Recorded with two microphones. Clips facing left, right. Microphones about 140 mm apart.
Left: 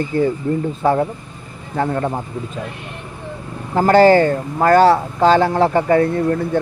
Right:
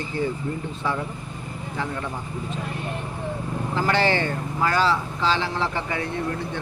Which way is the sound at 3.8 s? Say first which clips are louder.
Left 12 dB; 45° left (ahead or behind).